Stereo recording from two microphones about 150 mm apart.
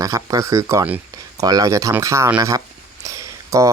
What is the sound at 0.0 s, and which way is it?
Speech, 20° right (ahead or behind).